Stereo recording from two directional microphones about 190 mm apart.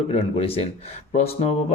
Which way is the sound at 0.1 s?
30° left (ahead or behind).